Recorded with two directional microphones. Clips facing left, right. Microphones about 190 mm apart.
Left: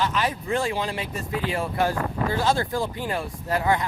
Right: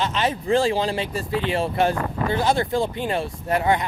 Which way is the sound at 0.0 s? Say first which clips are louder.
Right 2 dB; 25° right (ahead or behind).